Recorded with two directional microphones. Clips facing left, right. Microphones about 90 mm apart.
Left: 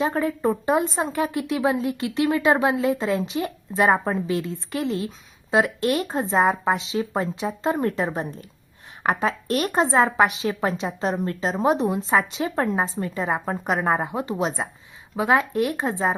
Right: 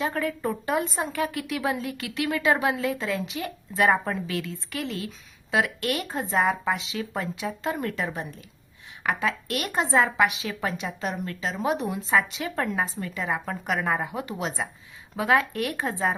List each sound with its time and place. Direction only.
0.0 s a woman's voice: 25° left (ahead or behind)